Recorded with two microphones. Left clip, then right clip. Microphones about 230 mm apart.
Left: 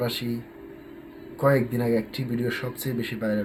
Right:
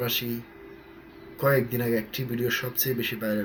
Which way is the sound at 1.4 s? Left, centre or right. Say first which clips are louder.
Left 2 dB; centre.